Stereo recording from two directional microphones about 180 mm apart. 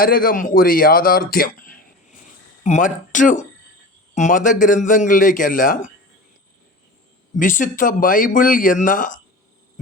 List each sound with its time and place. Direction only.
0.0 s a man's voice: 55° left (ahead or behind)
7.3 s a man's voice: 45° left (ahead or behind)